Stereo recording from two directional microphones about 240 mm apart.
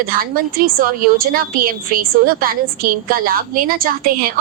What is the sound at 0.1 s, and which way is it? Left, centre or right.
A woman's voice, right.